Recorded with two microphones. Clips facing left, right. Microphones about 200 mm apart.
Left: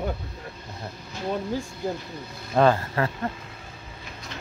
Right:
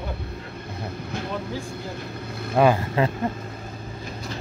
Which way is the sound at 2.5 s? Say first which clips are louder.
Right 1 dB; 10° right (ahead or behind).